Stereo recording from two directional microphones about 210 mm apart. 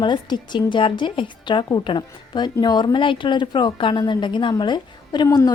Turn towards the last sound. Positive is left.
turn(degrees=20)  # may be behind; listen again after turning